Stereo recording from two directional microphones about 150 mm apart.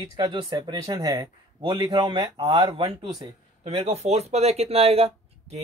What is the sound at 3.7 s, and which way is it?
Speech, 45° right (ahead or behind).